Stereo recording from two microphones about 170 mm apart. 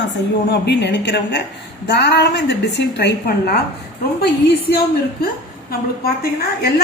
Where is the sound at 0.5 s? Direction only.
80° left.